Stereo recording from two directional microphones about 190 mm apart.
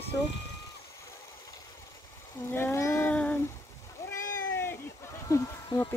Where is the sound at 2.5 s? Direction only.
15° left (ahead or behind).